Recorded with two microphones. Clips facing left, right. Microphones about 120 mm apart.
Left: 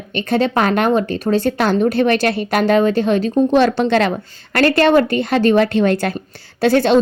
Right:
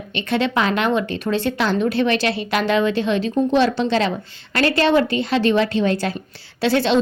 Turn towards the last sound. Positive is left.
turn(degrees=50)  # may be behind; listen again after turning